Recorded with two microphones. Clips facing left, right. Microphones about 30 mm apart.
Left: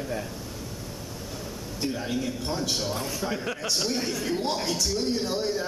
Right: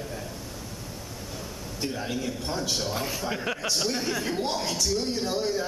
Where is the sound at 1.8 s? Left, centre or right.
Centre.